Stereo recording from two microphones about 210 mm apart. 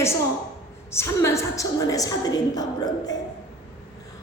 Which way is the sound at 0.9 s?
10° left (ahead or behind).